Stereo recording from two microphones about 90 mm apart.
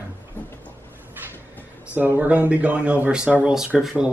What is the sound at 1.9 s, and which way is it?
Speech, 20° right (ahead or behind).